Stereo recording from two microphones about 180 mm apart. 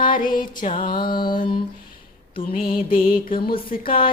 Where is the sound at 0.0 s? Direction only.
50° left (ahead or behind).